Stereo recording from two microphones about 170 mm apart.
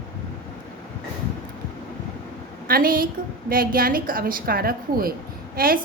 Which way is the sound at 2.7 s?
60° right (ahead or behind).